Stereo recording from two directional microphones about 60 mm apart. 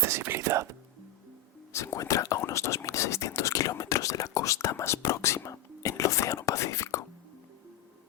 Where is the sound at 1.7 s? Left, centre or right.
Left.